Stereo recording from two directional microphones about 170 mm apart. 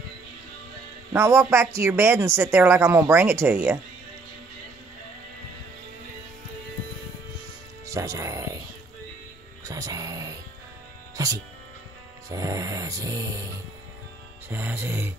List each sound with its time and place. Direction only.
1.1 s a woman's voice: 15° right (ahead or behind)
7.8 s speech: 20° right (ahead or behind)
9.7 s music: 20° right (ahead or behind)
11.1 s speech: 20° right (ahead or behind)
12.3 s music: 20° right (ahead or behind)
14.5 s a woman's voice: 10° right (ahead or behind)